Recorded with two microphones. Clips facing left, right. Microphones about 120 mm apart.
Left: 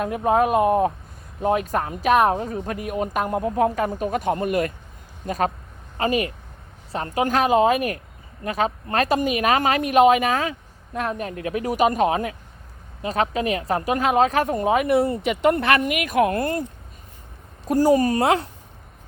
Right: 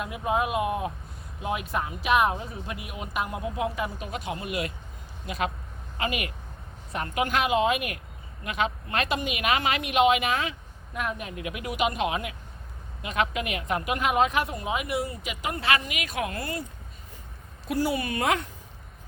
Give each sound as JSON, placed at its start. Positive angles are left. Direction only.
{"t": 0.0, "sound": "speech", "side_deg": 45}
{"t": 17.7, "sound": "speech", "side_deg": 40}